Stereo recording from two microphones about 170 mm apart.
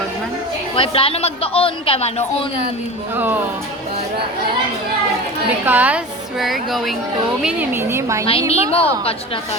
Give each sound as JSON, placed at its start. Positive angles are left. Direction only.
{"t": 0.8, "sound": "speech", "side_deg": 35}
{"t": 3.2, "sound": "a woman's voice", "side_deg": -10}
{"t": 5.6, "sound": "a woman's voice", "side_deg": -10}
{"t": 7.4, "sound": "a woman's voice", "side_deg": -10}
{"t": 8.3, "sound": "speech", "side_deg": 35}